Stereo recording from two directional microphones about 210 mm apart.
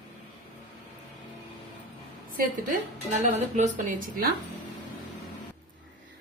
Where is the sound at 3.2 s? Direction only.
35° right (ahead or behind).